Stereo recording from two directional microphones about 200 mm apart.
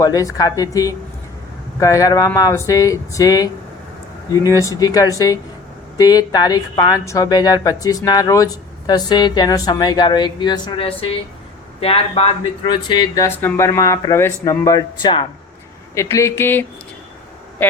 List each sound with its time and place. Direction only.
0.0 s speech: 15° left (ahead or behind)